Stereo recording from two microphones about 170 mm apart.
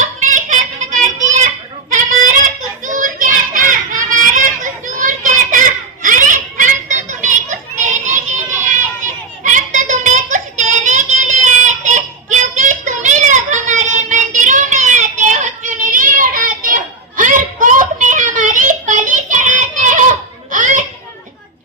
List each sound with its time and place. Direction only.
0.0 s child singing: 45° right (ahead or behind)
7.8 s children playing: 45° right (ahead or behind)
9.4 s child singing: 45° right (ahead or behind)